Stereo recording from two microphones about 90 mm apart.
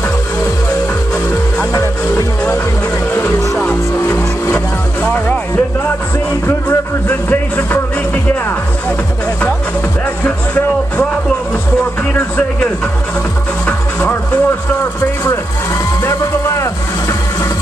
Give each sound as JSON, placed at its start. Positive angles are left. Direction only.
{"t": 1.7, "sound": "music", "side_deg": 35}
{"t": 3.5, "sound": "music", "side_deg": 15}
{"t": 5.0, "sound": "music", "side_deg": 15}
{"t": 6.4, "sound": "music", "side_deg": 25}
{"t": 10.2, "sound": "music", "side_deg": 20}
{"t": 13.7, "sound": "music", "side_deg": 20}
{"t": 16.0, "sound": "music", "side_deg": 30}